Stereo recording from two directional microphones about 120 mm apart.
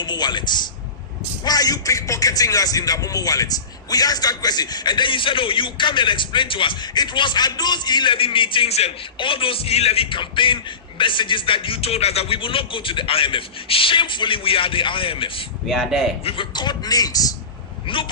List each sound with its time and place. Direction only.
0.0 s speech: 40° left (ahead or behind); by 8.9 s 55° left (ahead or behind)
9.1 s music: 45° left (ahead or behind)
15.7 s speech: centre (ahead or behind)
16.2 s speech: 45° left (ahead or behind)
17.8 s music: 45° left (ahead or behind)